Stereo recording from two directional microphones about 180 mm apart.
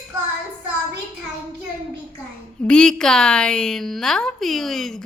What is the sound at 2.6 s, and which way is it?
A woman's voice, 5° left (ahead or behind).